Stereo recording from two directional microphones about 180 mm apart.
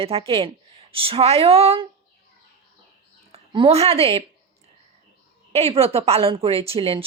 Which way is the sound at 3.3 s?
30° right (ahead or behind).